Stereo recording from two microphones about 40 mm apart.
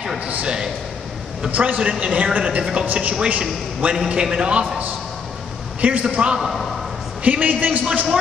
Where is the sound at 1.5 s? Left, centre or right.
Right.